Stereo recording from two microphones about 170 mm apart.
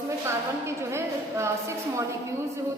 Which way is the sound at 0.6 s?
15° right (ahead or behind).